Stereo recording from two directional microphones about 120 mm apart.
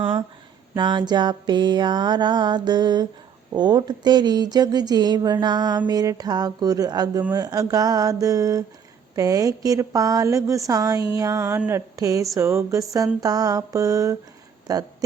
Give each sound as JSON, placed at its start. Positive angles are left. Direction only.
{"t": 0.0, "sound": "speech", "side_deg": -45}
{"t": 0.8, "sound": "mantra", "side_deg": -40}
{"t": 7.3, "sound": "a woman's voice", "side_deg": -30}